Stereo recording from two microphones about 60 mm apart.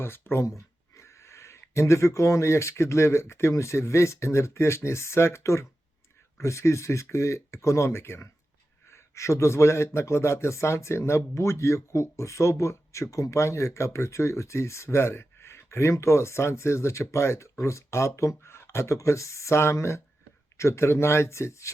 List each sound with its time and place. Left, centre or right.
0.0 s speech: left
0.4 s speech: left